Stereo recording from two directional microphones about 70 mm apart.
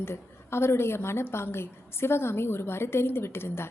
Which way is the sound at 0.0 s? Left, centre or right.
Left.